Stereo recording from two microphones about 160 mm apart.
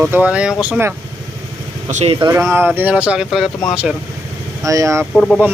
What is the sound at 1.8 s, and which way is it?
Speech, 40° right (ahead or behind).